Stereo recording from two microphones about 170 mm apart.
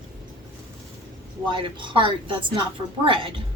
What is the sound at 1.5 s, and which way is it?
Speech, 30° right (ahead or behind).